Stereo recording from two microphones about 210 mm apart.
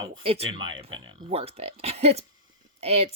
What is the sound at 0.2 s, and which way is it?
Speech, 25° right (ahead or behind).